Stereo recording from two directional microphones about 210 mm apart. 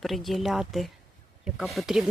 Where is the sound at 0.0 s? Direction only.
Centre (ahead or behind).